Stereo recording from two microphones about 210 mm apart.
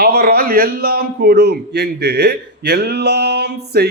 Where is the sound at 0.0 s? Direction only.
50° right (ahead or behind).